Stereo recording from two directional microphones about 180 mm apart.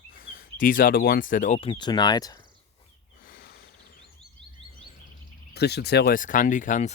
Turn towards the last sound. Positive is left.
turn(degrees=45)  # may be behind; listen again after turning